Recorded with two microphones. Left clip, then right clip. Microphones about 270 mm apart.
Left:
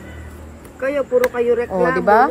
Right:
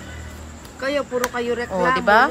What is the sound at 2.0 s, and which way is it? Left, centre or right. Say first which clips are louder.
Speech: left 2 dB; centre.